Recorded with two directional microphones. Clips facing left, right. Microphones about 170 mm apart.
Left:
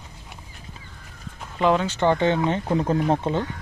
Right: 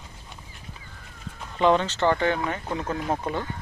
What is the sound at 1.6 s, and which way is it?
Speech, 5° left (ahead or behind).